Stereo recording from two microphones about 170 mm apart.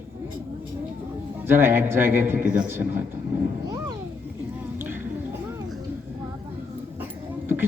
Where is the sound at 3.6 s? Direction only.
20° right (ahead or behind).